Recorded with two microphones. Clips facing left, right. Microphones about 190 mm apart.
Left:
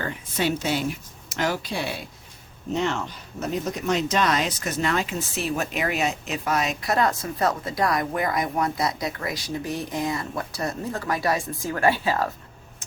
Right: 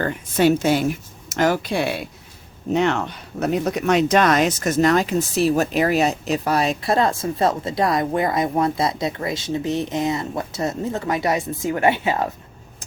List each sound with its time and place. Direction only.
0.0 s a woman's voice: 50° right (ahead or behind); by 12.3 s 20° right (ahead or behind)